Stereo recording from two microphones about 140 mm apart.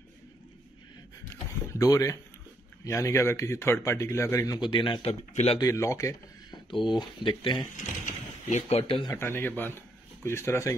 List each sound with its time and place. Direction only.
1.3 s a sound: 20° left (ahead or behind)
2.8 s speech: 20° left (ahead or behind); by 5.1 s 35° left (ahead or behind)
5.3 s speech: 50° left (ahead or behind)
5.6 s speech: 20° left (ahead or behind)
6.7 s speech: 35° left (ahead or behind)
7.7 s speech: 60° left (ahead or behind); by 9.1 s 40° left (ahead or behind)
9.1 s speech: 15° left (ahead or behind)